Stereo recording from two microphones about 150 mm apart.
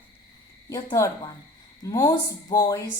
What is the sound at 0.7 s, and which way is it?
Speech, 20° left (ahead or behind).